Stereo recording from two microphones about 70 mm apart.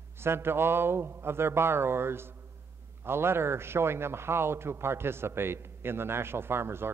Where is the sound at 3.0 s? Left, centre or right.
Right.